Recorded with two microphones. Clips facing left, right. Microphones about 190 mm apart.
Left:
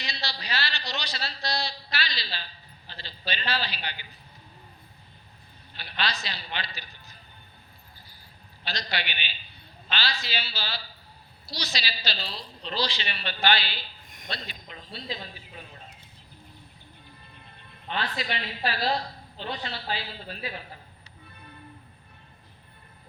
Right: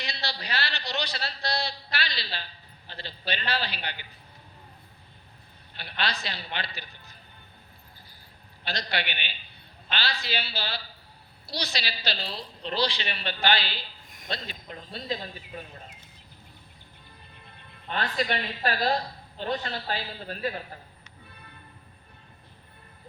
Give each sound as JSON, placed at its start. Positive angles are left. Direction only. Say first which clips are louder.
{"t": 0.0, "sound": "a man's voice", "louder": "right 1 dB", "side_deg": -60}
{"t": 5.7, "sound": "a man's voice", "louder": "even", "side_deg": -55}
{"t": 8.6, "sound": "a woman's voice", "louder": "right 2 dB", "side_deg": -55}
{"t": 17.9, "sound": "a woman's voice", "louder": "right 3 dB", "side_deg": -45}